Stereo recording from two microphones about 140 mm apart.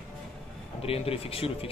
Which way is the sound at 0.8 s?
45° left (ahead or behind).